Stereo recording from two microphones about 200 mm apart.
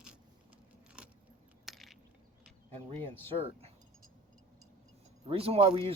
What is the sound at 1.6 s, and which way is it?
Crushing, centre (ahead or behind).